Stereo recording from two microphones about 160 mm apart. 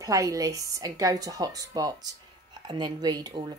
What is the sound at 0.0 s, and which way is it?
A woman's voice, 20° right (ahead or behind).